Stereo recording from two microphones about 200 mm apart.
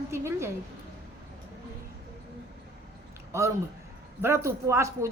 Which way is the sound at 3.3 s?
15° right (ahead or behind).